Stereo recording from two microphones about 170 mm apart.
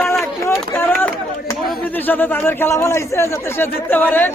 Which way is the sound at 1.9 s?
10° left (ahead or behind).